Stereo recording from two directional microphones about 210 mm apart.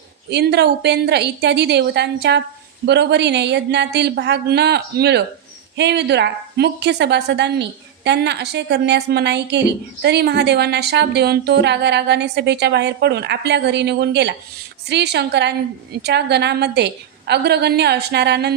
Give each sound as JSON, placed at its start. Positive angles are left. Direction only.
{"t": 0.3, "sound": "a woman's voice", "side_deg": -55}